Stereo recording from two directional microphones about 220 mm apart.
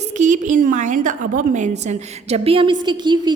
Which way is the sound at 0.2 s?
35° right (ahead or behind).